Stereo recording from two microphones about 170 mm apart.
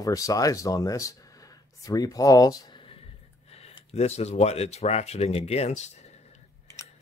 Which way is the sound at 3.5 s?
35° left (ahead or behind).